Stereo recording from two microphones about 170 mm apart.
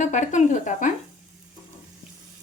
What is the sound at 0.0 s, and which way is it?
Speech, 45° left (ahead or behind).